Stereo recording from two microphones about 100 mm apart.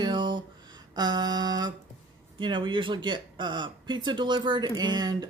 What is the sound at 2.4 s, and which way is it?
Speech, 55° right (ahead or behind).